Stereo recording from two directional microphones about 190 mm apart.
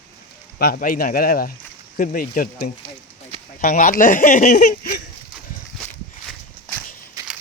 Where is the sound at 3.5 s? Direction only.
45° left (ahead or behind).